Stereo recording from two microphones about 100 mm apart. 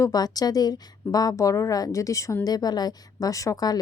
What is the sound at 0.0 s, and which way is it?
A woman's voice, 40° left (ahead or behind).